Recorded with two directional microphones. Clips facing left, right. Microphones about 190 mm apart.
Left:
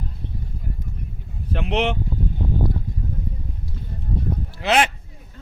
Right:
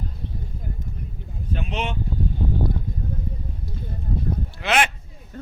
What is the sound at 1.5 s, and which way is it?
Speech, 70° left (ahead or behind).